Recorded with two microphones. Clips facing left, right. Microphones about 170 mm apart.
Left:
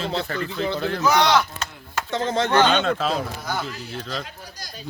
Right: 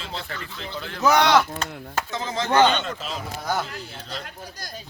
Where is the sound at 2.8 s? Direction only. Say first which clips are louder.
Left 8 dB; 90° left.